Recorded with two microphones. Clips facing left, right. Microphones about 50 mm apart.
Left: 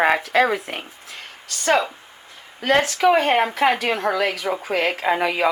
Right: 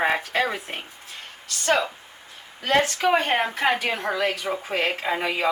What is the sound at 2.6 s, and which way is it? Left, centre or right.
A woman's voice, left.